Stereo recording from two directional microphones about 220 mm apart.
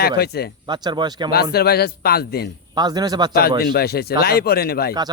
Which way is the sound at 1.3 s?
45° left (ahead or behind).